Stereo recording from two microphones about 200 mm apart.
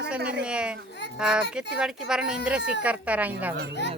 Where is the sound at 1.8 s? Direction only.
Centre (ahead or behind).